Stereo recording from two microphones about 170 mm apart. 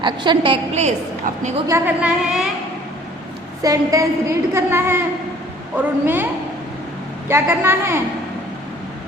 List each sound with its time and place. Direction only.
0.0 s a woman's voice: 25° right (ahead or behind)
1.6 s a woman's voice: 15° right (ahead or behind)
2.0 s a woman's voice: 5° right (ahead or behind)
3.6 s a woman's voice: 20° right (ahead or behind)
7.3 s a woman's voice: 15° right (ahead or behind)